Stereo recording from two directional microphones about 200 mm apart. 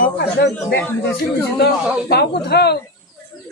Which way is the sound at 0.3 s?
55° left (ahead or behind).